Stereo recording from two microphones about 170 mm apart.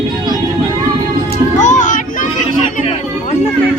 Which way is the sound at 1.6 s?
45° left (ahead or behind).